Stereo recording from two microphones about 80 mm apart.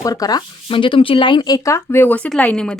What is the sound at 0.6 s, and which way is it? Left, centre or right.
Speech, left.